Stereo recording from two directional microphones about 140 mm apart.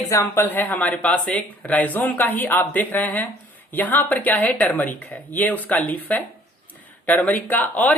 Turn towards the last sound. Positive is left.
turn(degrees=10)  # may be behind; listen again after turning